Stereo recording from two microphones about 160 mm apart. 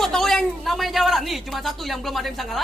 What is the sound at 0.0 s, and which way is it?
Speech, centre (ahead or behind).